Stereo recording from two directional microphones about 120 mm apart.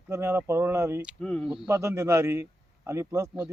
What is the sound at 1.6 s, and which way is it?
Speech, 20° right (ahead or behind).